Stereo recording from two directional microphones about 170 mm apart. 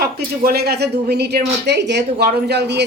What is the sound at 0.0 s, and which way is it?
Speech, 70° right (ahead or behind).